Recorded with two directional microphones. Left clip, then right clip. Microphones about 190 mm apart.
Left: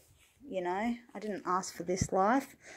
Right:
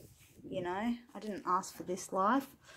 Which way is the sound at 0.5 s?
20° left (ahead or behind).